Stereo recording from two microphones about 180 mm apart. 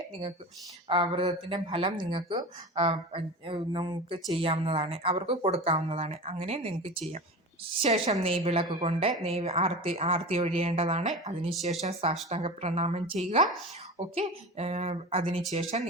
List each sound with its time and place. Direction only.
0.9 s speech: 30° right (ahead or behind)